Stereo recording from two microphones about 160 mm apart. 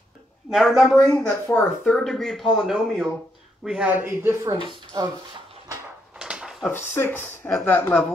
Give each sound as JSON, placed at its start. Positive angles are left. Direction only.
{"t": 0.5, "sound": "speech", "side_deg": 0}
{"t": 6.1, "sound": "a sound", "side_deg": -5}
{"t": 6.6, "sound": "speech", "side_deg": 15}